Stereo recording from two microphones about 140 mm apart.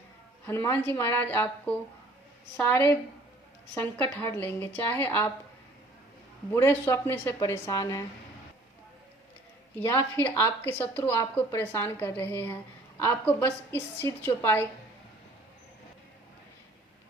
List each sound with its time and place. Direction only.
0.4 s a woman's voice: 20° left (ahead or behind)
6.5 s a woman's voice: 15° left (ahead or behind)
9.7 s a woman's voice: 15° left (ahead or behind)